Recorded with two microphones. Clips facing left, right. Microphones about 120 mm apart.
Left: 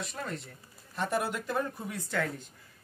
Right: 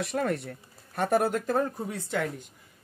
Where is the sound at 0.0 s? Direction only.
70° right (ahead or behind).